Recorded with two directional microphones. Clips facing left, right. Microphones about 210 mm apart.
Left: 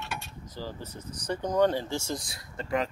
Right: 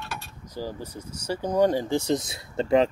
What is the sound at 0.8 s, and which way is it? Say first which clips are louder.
Speech: right 3 dB; 10° right (ahead or behind).